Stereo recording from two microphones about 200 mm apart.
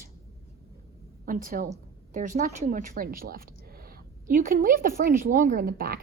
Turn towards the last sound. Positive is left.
turn(degrees=-45)  # may be behind; listen again after turning